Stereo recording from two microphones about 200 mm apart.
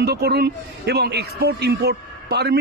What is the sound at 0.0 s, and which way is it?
A man's voice, 55° right (ahead or behind).